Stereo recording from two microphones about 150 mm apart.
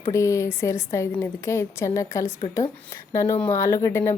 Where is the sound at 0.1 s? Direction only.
20° left (ahead or behind).